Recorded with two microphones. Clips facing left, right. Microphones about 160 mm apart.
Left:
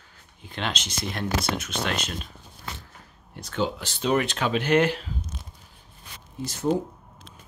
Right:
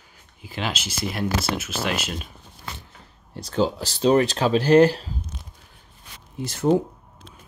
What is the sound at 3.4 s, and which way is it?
Speech, 35° right (ahead or behind).